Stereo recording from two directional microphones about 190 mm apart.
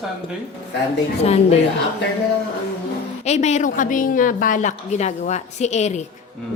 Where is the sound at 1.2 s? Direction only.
35° left (ahead or behind).